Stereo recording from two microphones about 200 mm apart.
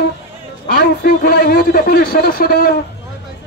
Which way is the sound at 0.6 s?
55° left (ahead or behind).